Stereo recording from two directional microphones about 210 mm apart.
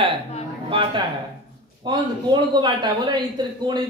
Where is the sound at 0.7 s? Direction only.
25° right (ahead or behind).